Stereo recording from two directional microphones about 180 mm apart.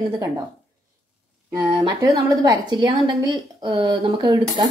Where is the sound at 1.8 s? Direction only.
20° right (ahead or behind).